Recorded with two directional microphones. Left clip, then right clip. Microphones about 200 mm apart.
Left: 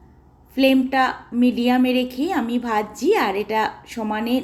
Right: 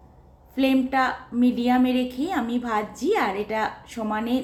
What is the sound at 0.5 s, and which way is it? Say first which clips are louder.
A woman's voice: left 4 dB; 15° left (ahead or behind).